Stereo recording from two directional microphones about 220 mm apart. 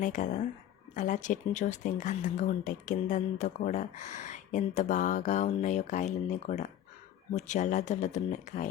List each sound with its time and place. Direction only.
0.0 s speech: 35° left (ahead or behind)